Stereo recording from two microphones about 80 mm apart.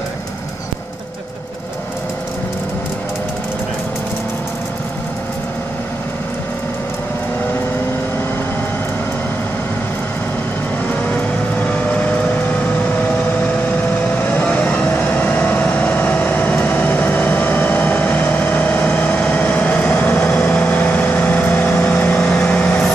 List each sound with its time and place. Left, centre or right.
10.9 s vehicle: left
14.1 s vehicle: left